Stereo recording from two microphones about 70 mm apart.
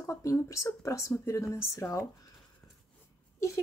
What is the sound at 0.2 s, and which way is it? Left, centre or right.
A woman's voice, left.